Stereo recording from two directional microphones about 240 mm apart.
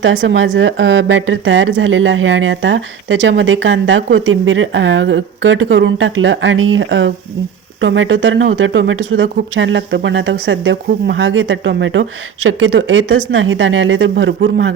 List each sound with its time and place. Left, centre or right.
0.0 s a woman's voice: right